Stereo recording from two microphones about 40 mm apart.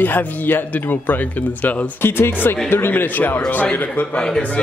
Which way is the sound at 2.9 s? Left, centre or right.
Left.